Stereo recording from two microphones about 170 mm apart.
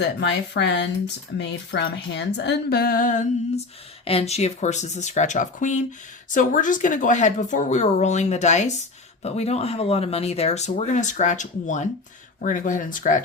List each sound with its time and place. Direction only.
0.0 s speech: 90° left; by 3.6 s 50° left (ahead or behind)
4.0 s a woman's voice: 35° left (ahead or behind)